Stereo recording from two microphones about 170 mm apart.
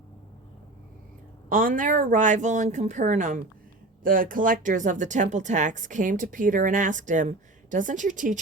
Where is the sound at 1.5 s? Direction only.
55° right (ahead or behind).